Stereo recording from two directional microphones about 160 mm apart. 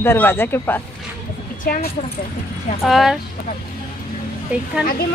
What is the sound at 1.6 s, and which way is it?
Speech, 55° left (ahead or behind).